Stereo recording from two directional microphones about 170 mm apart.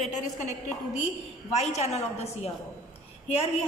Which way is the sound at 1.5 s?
40° left (ahead or behind).